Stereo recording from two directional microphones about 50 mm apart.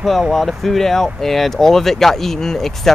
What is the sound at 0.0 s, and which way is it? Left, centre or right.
Speech, centre.